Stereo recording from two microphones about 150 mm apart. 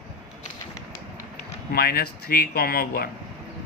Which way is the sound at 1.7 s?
90° left.